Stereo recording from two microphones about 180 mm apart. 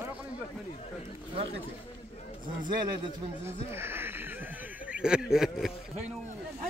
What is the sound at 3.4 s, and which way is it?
Speech, 15° right (ahead or behind).